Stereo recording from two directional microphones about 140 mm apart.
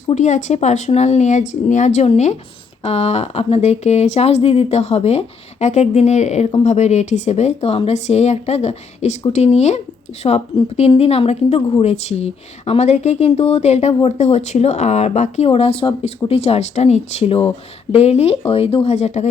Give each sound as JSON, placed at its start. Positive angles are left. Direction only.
{"t": 0.1, "sound": "speech", "side_deg": 60}